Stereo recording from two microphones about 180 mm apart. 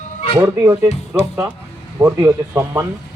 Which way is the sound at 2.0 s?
15° right (ahead or behind).